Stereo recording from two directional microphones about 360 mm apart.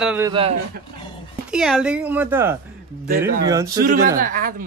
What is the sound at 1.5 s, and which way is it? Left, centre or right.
A man's voice, centre.